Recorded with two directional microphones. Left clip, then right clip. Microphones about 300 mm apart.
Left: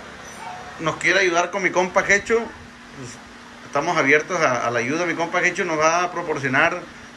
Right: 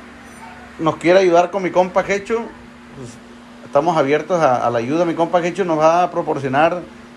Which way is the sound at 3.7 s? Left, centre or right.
Centre.